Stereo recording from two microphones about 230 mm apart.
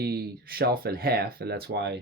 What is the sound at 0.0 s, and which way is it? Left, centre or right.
Speech, right.